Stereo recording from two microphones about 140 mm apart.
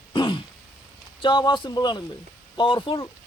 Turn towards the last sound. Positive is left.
turn(degrees=35)  # may be behind; listen again after turning